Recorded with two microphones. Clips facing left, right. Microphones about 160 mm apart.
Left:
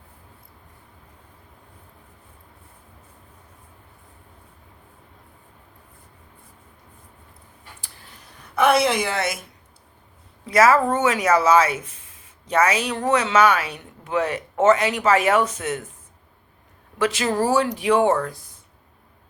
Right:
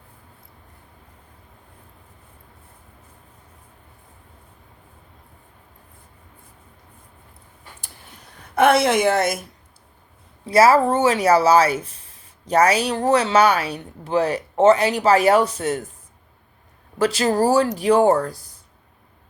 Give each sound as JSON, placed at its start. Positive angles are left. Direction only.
{"t": 8.8, "sound": "a woman's voice", "side_deg": -55}
{"t": 10.4, "sound": "speech", "side_deg": -30}
{"t": 17.0, "sound": "speech", "side_deg": -35}